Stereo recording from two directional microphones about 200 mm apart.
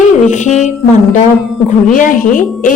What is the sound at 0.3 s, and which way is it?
A woman's voice, 35° left (ahead or behind).